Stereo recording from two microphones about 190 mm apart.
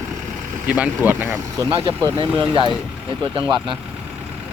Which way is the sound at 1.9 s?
25° right (ahead or behind).